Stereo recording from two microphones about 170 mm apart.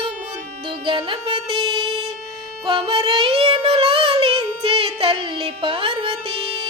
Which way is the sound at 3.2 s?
35° right (ahead or behind).